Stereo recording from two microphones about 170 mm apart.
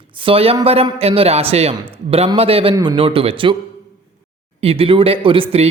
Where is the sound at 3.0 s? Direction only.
35° right (ahead or behind).